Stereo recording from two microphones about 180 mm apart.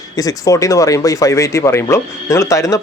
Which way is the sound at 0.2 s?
20° left (ahead or behind).